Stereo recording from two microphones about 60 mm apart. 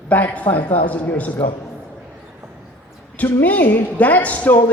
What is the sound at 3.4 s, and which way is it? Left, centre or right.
Speech, left.